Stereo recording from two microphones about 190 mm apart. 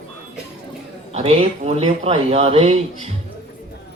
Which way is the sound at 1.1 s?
35° right (ahead or behind).